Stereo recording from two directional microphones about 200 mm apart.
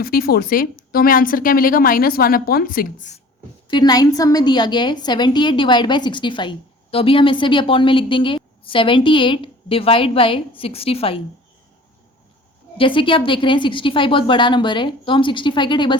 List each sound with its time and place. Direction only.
0.0 s speech: 50° left (ahead or behind)
3.7 s a woman's voice: 20° left (ahead or behind)
12.7 s a woman's voice: 25° left (ahead or behind)